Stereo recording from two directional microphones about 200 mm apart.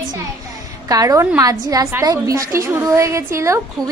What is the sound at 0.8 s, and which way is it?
A woman's voice, 15° right (ahead or behind).